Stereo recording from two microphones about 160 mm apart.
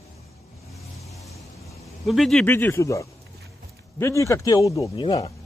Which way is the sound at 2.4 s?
10° left (ahead or behind).